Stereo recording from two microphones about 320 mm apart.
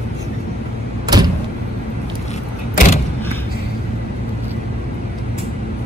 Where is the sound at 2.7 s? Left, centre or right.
Left.